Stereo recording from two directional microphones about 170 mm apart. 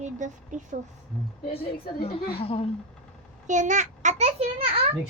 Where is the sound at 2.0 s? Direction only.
35° left (ahead or behind).